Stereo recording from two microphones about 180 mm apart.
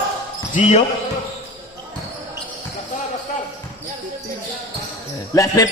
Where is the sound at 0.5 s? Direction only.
40° left (ahead or behind).